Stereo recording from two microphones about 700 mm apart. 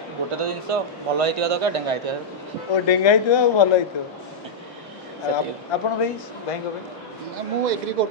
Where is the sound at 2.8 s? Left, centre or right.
Left.